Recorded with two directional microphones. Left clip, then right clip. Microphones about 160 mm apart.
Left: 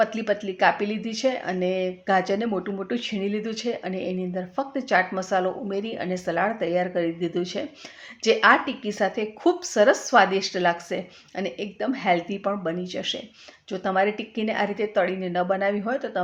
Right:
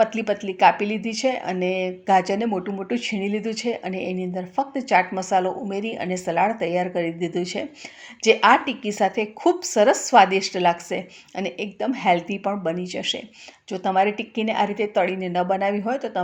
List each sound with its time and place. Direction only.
0.0 s speech: 20° right (ahead or behind)